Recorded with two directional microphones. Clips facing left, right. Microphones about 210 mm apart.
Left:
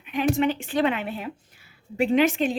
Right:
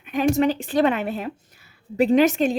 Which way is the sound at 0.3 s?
35° right (ahead or behind).